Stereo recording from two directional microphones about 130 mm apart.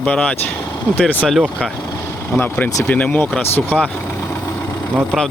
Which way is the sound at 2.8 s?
10° left (ahead or behind).